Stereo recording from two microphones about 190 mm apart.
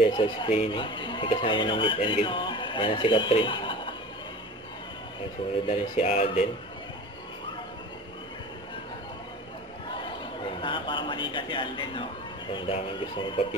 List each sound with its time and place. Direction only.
0.0 s speech: 25° left (ahead or behind)
5.7 s speech: 30° left (ahead or behind)
10.0 s a man's voice: 25° left (ahead or behind)